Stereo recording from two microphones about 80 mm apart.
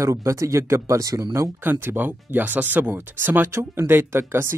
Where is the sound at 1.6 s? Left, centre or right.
Right.